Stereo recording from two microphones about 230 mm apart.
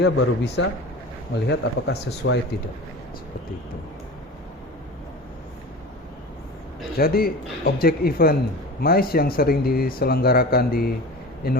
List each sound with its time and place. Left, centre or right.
0.0 s speech: left
6.9 s speech: left